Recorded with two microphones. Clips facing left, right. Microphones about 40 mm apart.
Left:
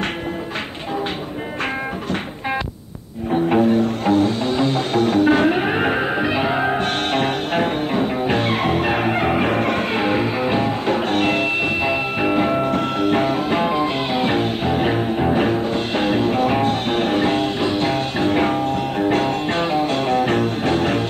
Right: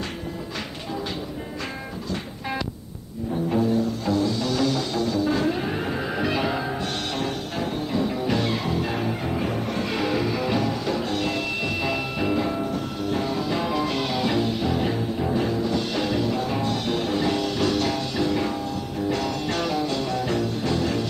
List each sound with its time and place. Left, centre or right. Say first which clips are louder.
3.4 s music: left 6 dB; left
6.1 s music: left 5 dB; left
6.6 s music: left 8 dB; left
9.9 s music: left 5 dB; left
17.6 s music: left 4 dB; left
17.9 s music: left 6 dB; left